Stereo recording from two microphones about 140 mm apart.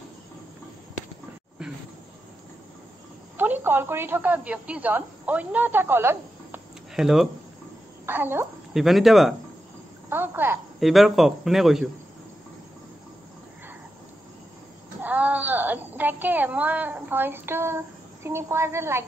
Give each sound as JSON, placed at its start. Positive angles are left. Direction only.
{"t": 3.3, "sound": "a woman's voice", "side_deg": -15}
{"t": 7.0, "sound": "a man's voice", "side_deg": -5}
{"t": 8.1, "sound": "a woman's voice", "side_deg": -15}
{"t": 8.7, "sound": "a man's voice", "side_deg": 0}
{"t": 10.0, "sound": "a woman's voice", "side_deg": -15}
{"t": 10.8, "sound": "a man's voice", "side_deg": 0}
{"t": 15.0, "sound": "speech", "side_deg": -10}